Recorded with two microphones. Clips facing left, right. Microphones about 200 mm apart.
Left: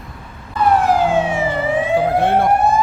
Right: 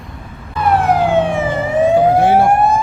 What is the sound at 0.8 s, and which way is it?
Emergency vehicle, 60° right (ahead or behind).